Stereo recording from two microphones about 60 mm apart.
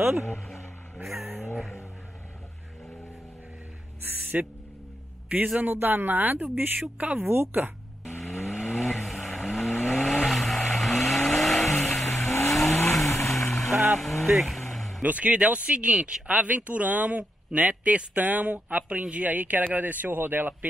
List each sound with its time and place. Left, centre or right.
1.0 s vehicle: centre
4.0 s owl: right
5.6 s speech: right
7.0 s speech: right
7.2 s speech: right
8.2 s vehicle: centre
13.9 s speech: centre
14.2 s vehicle: centre
15.0 s speech: right